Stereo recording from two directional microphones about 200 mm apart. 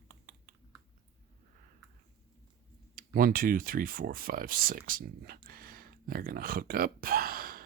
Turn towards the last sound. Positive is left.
turn(degrees=-50)  # may be behind; listen again after turning